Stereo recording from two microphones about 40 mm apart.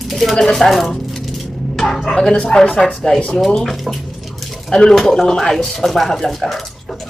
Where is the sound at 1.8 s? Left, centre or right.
Centre.